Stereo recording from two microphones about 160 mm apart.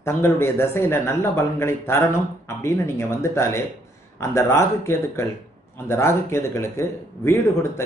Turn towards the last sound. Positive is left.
turn(degrees=15)  # may be behind; listen again after turning